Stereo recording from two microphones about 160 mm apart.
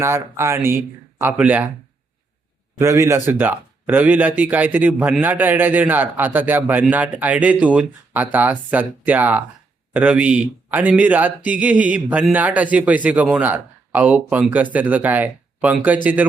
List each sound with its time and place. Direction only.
0.0 s speech: 15° right (ahead or behind)
2.7 s speech: 20° right (ahead or behind)